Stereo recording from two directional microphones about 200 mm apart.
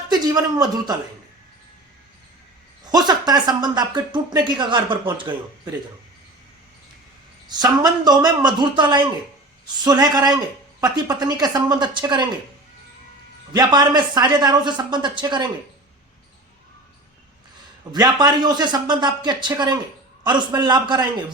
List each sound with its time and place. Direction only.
0.1 s speech: 20° right (ahead or behind)
2.9 s speech: 20° right (ahead or behind)
7.5 s speech: 20° right (ahead or behind)
13.5 s speech: 20° right (ahead or behind)
17.9 s speech: 20° right (ahead or behind)